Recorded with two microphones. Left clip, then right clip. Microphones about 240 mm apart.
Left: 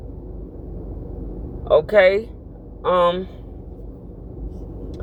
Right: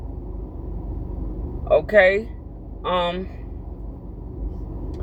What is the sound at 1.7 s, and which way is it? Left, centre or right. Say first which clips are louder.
Speech: left 1 dB; left.